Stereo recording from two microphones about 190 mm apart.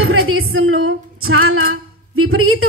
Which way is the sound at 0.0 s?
90° right.